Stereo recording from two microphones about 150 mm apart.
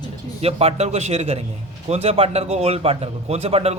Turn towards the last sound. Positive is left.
turn(degrees=-45)  # may be behind; listen again after turning